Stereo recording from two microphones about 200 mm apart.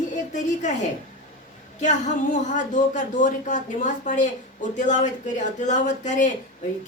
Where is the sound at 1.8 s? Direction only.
40° left (ahead or behind).